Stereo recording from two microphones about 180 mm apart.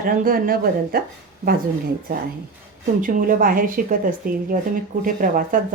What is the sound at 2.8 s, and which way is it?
A woman's voice, 50° right (ahead or behind).